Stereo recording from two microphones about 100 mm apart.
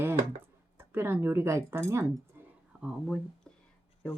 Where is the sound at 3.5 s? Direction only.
10° left (ahead or behind).